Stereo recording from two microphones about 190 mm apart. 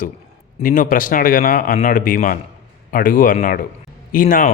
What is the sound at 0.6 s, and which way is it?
Speech, 45° left (ahead or behind).